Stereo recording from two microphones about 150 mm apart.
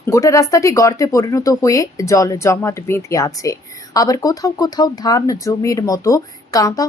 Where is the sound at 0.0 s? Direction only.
20° left (ahead or behind).